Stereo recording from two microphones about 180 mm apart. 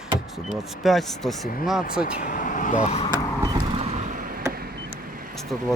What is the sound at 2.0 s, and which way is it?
Speech, 50° left (ahead or behind).